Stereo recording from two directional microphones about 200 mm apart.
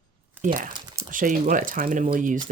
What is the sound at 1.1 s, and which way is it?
Speech, 40° right (ahead or behind).